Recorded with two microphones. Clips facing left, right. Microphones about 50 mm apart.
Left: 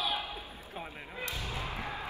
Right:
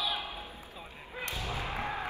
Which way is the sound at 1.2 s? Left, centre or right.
Right.